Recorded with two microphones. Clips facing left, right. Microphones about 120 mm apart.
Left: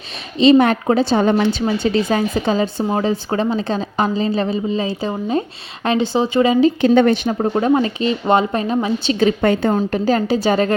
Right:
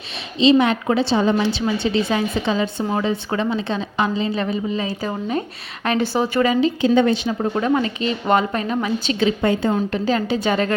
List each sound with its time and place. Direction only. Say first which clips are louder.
0.6 s a woman's voice: left 3 dB; 45° left (ahead or behind)
1.2 s a woman's voice: left 3 dB; 55° left (ahead or behind); by 6.6 s 25° left (ahead or behind)
6.8 s a woman's voice: left 3 dB; 60° left (ahead or behind)
7.3 s a woman's voice: left 4 dB; 30° left (ahead or behind)
9.2 s a woman's voice: left 3 dB; 60° left (ahead or behind)
9.7 s a woman's voice: left 3 dB; 40° left (ahead or behind)